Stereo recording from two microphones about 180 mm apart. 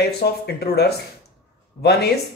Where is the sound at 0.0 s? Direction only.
65° left (ahead or behind).